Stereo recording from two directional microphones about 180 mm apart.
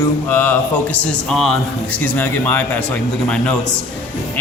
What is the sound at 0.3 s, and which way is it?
A man's voice, 10° left (ahead or behind).